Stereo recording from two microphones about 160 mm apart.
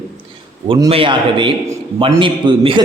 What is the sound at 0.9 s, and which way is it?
A man's voice, 35° right (ahead or behind).